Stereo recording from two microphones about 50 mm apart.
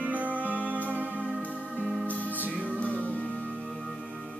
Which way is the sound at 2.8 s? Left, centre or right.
Left.